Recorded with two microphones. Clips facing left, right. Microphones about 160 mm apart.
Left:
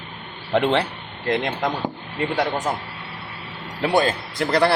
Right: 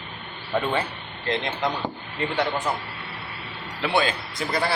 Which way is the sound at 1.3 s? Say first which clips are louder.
Left 3 dB; 55° left (ahead or behind).